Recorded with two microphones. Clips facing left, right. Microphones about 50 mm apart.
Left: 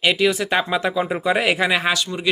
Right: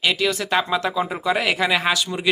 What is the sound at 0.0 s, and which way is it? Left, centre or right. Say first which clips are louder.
Speech: left 3 dB; centre.